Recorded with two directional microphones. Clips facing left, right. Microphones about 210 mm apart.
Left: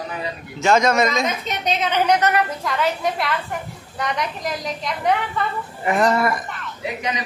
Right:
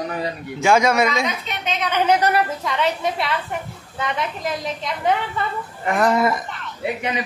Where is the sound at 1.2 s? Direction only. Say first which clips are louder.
Left 2 dB; 40° left (ahead or behind).